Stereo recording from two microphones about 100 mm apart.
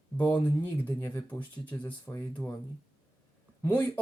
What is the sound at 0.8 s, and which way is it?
Speech, 25° left (ahead or behind).